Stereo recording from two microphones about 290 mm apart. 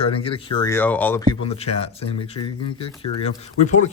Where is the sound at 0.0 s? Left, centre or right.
Centre.